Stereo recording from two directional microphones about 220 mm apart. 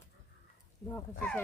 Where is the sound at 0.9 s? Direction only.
5° left (ahead or behind).